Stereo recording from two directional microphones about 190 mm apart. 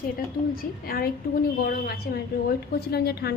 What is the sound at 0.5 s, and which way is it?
A woman's voice, 50° left (ahead or behind).